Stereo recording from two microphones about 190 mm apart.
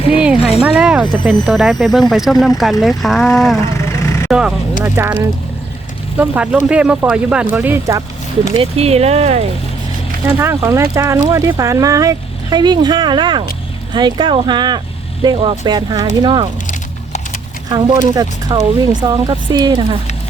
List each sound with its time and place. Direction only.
0.2 s a sound: 5° right (ahead or behind)
1.2 s speech: 5° right (ahead or behind)
8.5 s speech: 30° right (ahead or behind)
10.3 s speech: 15° right (ahead or behind)
17.7 s speech: 20° right (ahead or behind)